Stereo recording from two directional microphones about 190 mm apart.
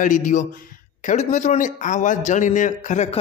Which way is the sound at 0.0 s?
40° left (ahead or behind).